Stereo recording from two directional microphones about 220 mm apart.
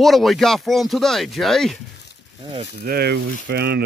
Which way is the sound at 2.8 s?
45° right (ahead or behind).